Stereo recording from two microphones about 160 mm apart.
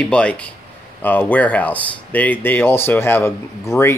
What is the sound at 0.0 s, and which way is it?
Speech, 5° left (ahead or behind).